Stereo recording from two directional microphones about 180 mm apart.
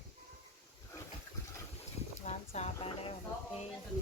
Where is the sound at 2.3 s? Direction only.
35° left (ahead or behind).